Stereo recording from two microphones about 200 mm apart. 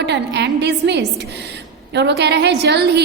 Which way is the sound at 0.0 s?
60° right (ahead or behind).